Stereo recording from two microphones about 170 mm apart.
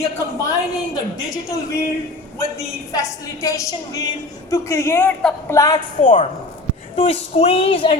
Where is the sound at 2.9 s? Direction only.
20° left (ahead or behind).